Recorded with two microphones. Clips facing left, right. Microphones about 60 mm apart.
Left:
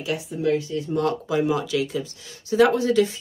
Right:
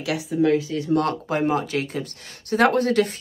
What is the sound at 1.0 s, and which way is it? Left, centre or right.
Speech, right.